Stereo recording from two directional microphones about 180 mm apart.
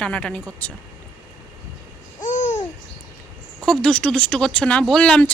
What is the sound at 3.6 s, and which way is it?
Speech, 5° left (ahead or behind).